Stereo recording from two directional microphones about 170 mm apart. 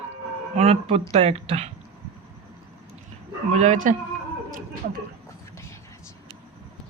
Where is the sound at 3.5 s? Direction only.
40° right (ahead or behind).